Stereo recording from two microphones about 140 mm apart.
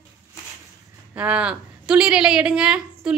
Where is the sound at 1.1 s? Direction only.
10° right (ahead or behind).